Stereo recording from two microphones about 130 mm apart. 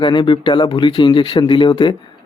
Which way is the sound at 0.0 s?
40° left (ahead or behind).